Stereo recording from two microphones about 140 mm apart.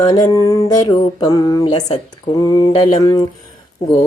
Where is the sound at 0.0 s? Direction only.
25° left (ahead or behind).